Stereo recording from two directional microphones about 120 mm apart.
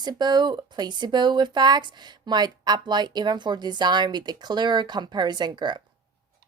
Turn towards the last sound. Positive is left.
turn(degrees=-40)  # may be behind; listen again after turning